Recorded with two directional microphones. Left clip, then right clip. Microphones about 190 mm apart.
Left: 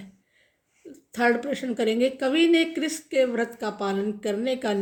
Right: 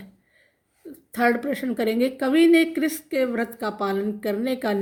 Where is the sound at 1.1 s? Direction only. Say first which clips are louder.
Right 1 dB; 45° right (ahead or behind).